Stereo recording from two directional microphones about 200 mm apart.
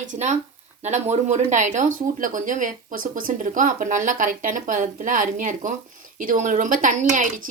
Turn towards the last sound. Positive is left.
turn(degrees=-40)  # may be behind; listen again after turning